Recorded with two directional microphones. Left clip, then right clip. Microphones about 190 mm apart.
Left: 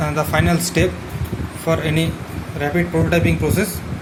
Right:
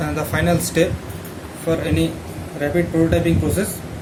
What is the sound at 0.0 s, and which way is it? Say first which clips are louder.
Speech: left 2 dB; 20° left (ahead or behind).